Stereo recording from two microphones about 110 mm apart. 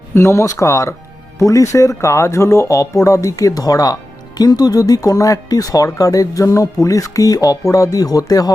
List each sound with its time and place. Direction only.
0.1 s speech: 25° left (ahead or behind)